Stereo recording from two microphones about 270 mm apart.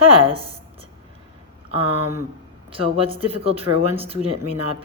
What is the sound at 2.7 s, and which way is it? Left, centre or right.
A woman's voice, centre.